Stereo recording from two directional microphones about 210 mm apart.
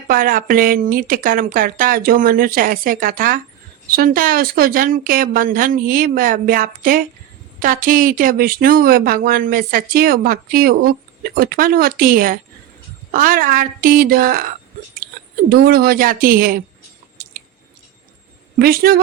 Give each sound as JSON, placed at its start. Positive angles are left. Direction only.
{"t": 0.1, "sound": "speech", "side_deg": -40}
{"t": 18.6, "sound": "speech", "side_deg": -45}